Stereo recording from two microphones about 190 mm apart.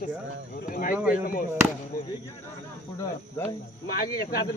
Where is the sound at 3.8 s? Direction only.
50° left (ahead or behind).